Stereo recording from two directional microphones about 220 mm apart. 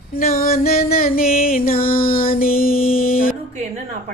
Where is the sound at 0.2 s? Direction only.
40° left (ahead or behind).